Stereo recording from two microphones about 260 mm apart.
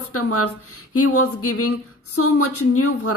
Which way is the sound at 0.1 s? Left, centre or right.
Left.